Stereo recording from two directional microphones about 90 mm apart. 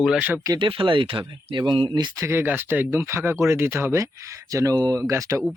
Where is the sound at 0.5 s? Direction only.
75° right (ahead or behind).